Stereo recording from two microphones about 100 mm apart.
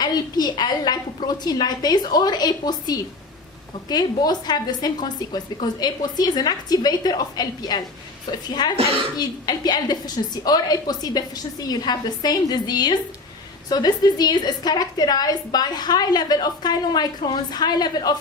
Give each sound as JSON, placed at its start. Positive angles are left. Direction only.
{"t": 0.0, "sound": "a woman's voice", "side_deg": 45}